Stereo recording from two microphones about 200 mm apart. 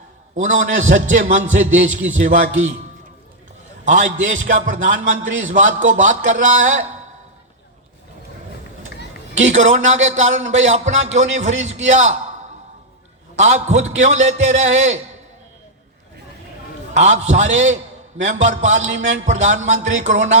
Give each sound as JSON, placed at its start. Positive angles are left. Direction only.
{"t": 0.3, "sound": "speech", "side_deg": -40}
{"t": 4.2, "sound": "speech", "side_deg": -40}
{"t": 9.3, "sound": "speech", "side_deg": -35}
{"t": 13.3, "sound": "speech", "side_deg": -35}
{"t": 16.9, "sound": "speech", "side_deg": -35}